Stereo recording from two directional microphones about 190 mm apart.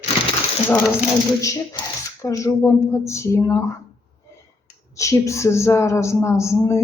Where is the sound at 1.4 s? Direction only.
15° left (ahead or behind).